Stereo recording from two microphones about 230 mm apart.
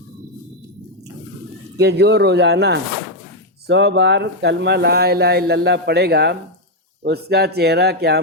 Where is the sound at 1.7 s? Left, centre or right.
Right.